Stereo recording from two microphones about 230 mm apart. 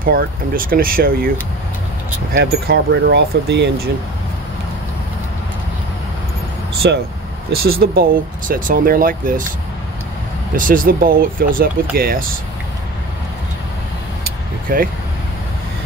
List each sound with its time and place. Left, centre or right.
0.0 s speech: right
2.3 s speech: right
6.8 s speech: right
10.5 s speech: right
14.7 s speech: right